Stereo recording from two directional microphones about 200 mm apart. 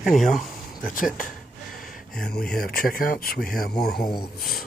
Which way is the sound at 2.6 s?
50° left (ahead or behind).